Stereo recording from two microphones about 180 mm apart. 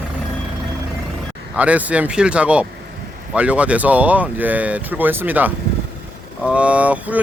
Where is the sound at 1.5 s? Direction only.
10° right (ahead or behind).